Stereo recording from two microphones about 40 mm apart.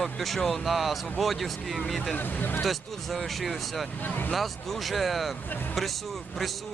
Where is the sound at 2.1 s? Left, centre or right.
Left.